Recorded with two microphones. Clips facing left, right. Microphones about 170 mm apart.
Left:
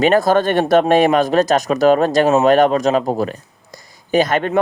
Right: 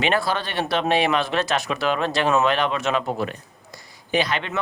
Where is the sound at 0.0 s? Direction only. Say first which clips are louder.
Left 10 dB; 45° left (ahead or behind).